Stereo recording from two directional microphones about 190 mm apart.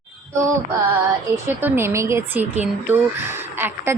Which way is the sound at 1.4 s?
10° right (ahead or behind).